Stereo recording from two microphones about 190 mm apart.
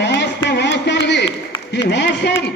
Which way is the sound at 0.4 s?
65° left (ahead or behind).